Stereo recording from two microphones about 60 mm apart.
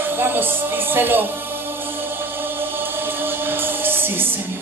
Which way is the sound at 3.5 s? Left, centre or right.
Right.